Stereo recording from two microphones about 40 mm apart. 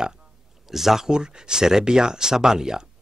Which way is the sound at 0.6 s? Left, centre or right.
Centre.